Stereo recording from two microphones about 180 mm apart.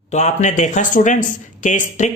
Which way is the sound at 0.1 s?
40° left (ahead or behind).